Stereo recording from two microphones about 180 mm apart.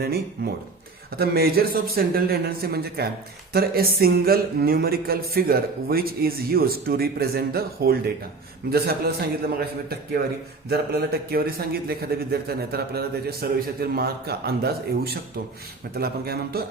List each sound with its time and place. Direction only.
0.0 s a man's voice: 60° right (ahead or behind)